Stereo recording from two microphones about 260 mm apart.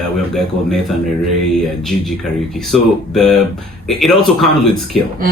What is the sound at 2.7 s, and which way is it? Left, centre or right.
Speech, centre.